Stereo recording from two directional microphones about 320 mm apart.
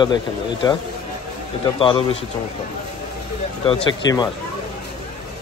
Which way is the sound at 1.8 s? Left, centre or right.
Centre.